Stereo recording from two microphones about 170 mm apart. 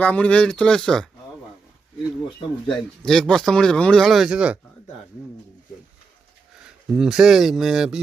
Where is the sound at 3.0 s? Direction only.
5° left (ahead or behind).